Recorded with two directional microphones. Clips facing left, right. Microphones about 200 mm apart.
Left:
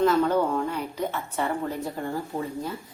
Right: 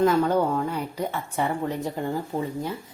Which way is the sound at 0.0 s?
10° right (ahead or behind).